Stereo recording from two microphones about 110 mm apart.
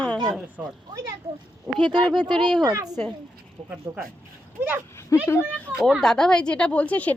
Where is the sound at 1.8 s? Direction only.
45° right (ahead or behind).